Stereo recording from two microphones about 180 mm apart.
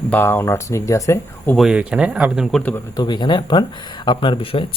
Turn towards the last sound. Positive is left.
turn(degrees=30)  # may be behind; listen again after turning